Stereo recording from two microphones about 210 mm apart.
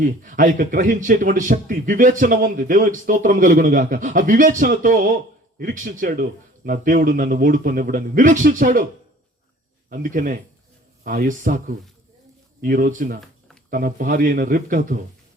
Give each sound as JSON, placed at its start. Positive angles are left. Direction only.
{"t": 0.0, "sound": "a man's voice", "side_deg": -40}
{"t": 9.9, "sound": "a man's voice", "side_deg": -40}
{"t": 12.6, "sound": "a man's voice", "side_deg": -40}